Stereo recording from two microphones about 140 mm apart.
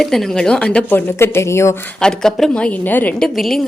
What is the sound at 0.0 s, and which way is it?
A woman's voice, centre (ahead or behind).